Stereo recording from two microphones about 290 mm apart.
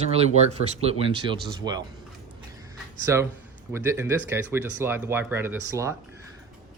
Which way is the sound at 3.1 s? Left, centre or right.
Centre.